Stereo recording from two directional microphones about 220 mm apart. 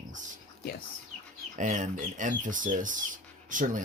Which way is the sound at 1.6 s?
35° right (ahead or behind).